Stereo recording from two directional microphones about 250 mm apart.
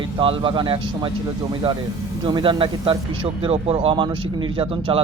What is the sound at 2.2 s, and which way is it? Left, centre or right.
Speech, centre.